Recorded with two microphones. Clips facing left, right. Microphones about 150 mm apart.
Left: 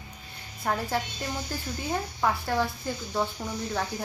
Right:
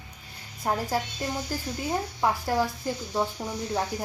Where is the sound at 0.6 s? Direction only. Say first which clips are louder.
Right 1 dB; 25° right (ahead or behind).